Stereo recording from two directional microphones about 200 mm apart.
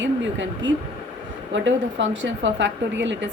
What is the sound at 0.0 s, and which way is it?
Speech, 65° right (ahead or behind).